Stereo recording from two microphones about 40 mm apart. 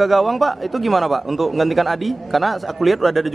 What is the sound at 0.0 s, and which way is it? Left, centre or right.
A man's voice, centre.